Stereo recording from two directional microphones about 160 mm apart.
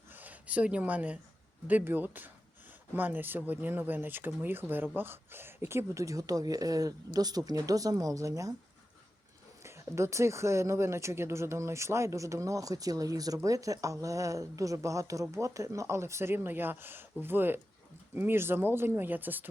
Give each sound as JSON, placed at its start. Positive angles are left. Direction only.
{"t": 0.1, "sound": "speech", "side_deg": -10}
{"t": 9.6, "sound": "speech", "side_deg": -15}